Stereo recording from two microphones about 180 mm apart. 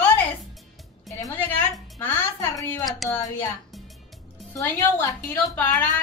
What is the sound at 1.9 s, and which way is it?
Speech, 15° left (ahead or behind).